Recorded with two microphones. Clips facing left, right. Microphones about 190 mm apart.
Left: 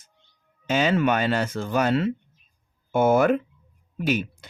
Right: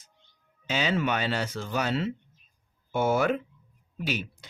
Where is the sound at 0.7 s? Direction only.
50° left (ahead or behind).